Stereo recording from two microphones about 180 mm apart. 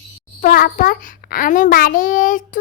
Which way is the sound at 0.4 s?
55° left (ahead or behind).